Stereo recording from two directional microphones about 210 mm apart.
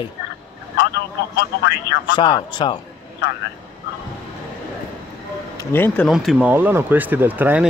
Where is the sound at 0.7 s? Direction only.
55° left (ahead or behind).